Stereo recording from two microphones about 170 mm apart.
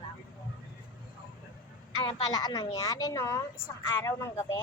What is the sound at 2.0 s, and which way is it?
A woman's voice, 25° left (ahead or behind).